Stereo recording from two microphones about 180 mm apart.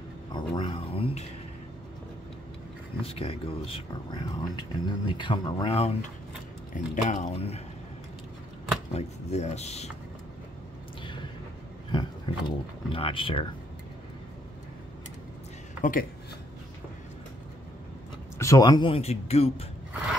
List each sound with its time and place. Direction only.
0.3 s a sound: 30° left (ahead or behind)
3.0 s speech: 35° left (ahead or behind)
8.9 s speech: 40° left (ahead or behind)
11.9 s speech: 25° left (ahead or behind)
15.8 s speech: 50° left (ahead or behind)
18.4 s speech: 20° left (ahead or behind); by 19.6 s 35° left (ahead or behind)